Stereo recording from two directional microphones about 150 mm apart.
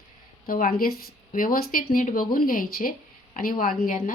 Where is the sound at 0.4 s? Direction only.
70° left (ahead or behind).